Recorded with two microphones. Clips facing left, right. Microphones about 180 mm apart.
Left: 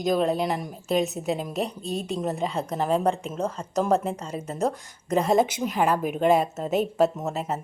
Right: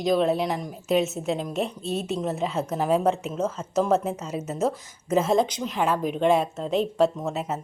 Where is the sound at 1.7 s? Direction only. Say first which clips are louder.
Right 1 dB; 35° left (ahead or behind).